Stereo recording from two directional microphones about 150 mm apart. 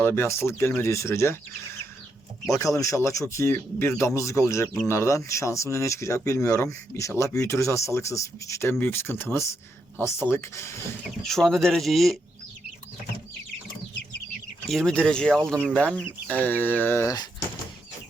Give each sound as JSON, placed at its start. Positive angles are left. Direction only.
{"t": 0.0, "sound": "speech", "side_deg": 15}
{"t": 11.3, "sound": "speech", "side_deg": 5}
{"t": 14.7, "sound": "speech", "side_deg": 5}